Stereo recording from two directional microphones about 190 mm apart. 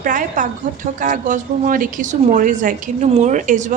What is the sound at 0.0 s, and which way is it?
A woman's voice, 45° right (ahead or behind).